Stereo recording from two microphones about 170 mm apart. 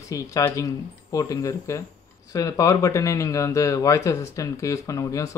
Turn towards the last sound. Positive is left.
turn(degrees=20)  # may be behind; listen again after turning